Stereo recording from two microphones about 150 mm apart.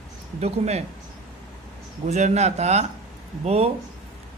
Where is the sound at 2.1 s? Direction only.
50° right (ahead or behind).